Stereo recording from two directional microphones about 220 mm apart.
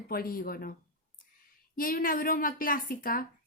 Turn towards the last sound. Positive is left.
turn(degrees=40)  # may be behind; listen again after turning